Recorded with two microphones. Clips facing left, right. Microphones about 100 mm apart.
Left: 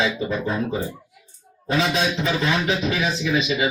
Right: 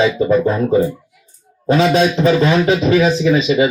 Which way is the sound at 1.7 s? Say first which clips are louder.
Right 9 dB; 35° right (ahead or behind).